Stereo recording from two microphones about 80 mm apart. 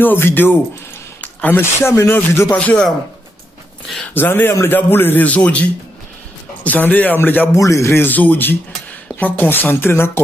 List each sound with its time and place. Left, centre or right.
0.0 s a man's voice: left
2.5 s a man's voice: centre
4.1 s a man's voice: left
7.5 s a man's voice: left